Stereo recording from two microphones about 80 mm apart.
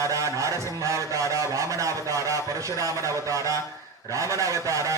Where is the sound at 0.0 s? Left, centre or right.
Right.